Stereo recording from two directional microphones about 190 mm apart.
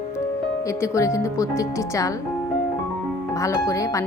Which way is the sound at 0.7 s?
15° left (ahead or behind).